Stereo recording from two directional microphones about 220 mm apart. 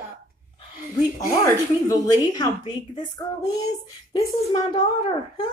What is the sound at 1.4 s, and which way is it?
A woman's voice, 15° left (ahead or behind).